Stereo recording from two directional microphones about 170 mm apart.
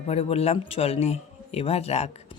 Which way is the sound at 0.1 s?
35° left (ahead or behind).